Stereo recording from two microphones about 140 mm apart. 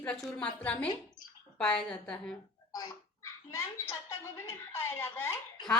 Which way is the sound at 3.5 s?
20° left (ahead or behind).